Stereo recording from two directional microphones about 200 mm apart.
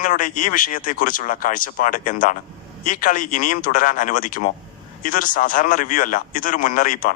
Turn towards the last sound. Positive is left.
turn(degrees=40)  # may be behind; listen again after turning